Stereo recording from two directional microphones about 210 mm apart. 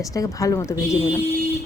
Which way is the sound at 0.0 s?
15° left (ahead or behind).